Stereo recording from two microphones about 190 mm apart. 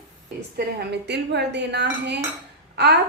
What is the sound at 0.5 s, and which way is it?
Speech, 60° right (ahead or behind).